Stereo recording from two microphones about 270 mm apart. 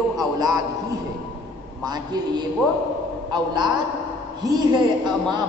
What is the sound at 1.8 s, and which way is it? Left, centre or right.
A man's voice, centre.